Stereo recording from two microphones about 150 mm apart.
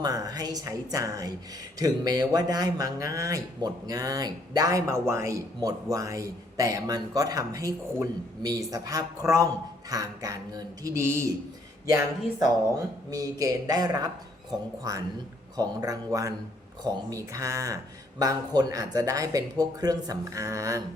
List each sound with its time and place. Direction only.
0.0 s a man's voice: 25° right (ahead or behind)
13.1 s a man's voice: 25° right (ahead or behind)